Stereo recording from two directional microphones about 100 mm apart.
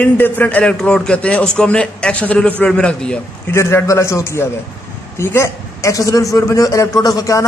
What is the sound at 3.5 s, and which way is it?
A man's voice, 25° left (ahead or behind).